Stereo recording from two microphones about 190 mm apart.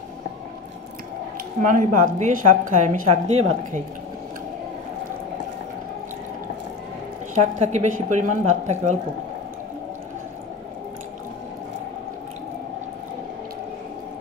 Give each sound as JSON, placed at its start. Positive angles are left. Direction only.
{"t": 1.6, "sound": "a woman's voice", "side_deg": -45}
{"t": 7.5, "sound": "a woman's voice", "side_deg": -35}